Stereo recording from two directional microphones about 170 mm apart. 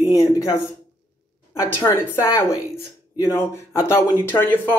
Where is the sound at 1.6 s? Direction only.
15° left (ahead or behind).